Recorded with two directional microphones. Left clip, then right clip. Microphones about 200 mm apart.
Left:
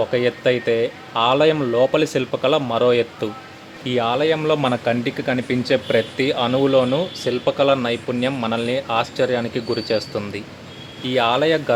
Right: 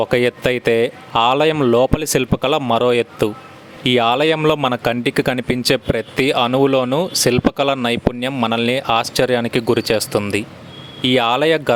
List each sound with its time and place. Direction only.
0.0 s speech: 40° right (ahead or behind)